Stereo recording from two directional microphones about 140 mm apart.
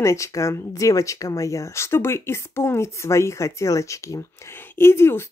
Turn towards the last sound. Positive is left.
turn(degrees=20)  # may be behind; listen again after turning